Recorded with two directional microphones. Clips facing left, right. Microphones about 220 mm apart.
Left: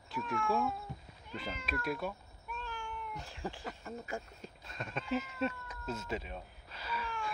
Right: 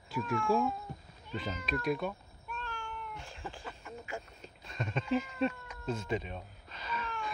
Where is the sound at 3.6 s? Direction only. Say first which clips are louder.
Left 2 dB; 35° left (ahead or behind).